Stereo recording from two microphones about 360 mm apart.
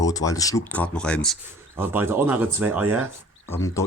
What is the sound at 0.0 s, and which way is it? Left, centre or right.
Speech, centre.